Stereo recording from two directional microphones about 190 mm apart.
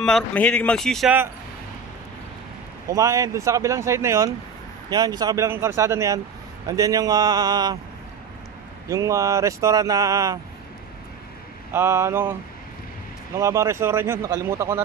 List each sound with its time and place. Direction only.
0.0 s a man's voice: 5° left (ahead or behind)
2.9 s speech: 15° right (ahead or behind)
8.8 s speech: 15° right (ahead or behind)
11.7 s speech: 15° right (ahead or behind)
13.4 s speech: 15° right (ahead or behind)